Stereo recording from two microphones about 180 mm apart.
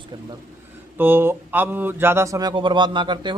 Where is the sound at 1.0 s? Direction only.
10° right (ahead or behind).